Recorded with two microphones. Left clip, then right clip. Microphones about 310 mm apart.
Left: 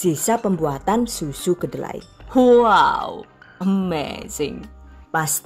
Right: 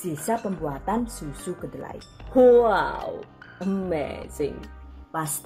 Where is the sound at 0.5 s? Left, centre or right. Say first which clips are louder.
Left 7 dB; left.